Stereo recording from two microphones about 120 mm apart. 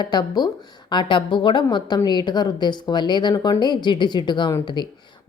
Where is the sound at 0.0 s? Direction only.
35° left (ahead or behind).